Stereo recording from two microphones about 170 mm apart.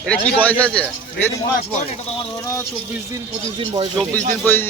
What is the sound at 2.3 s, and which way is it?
Speech, 15° left (ahead or behind).